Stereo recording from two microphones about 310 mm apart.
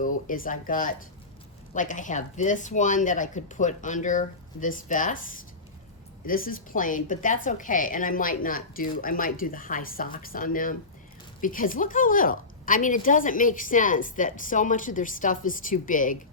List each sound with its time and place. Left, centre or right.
0.0 s a woman's voice: left